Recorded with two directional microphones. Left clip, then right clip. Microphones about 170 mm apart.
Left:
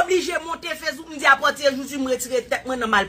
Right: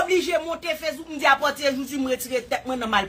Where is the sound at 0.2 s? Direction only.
35° right (ahead or behind).